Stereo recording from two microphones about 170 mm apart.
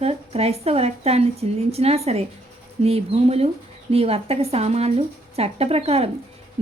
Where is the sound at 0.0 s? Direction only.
35° right (ahead or behind).